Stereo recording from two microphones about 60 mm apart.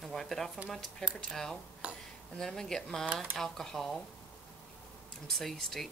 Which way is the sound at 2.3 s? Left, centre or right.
Centre.